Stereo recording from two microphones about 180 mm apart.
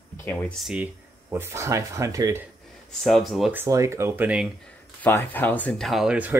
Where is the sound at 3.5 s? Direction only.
15° right (ahead or behind).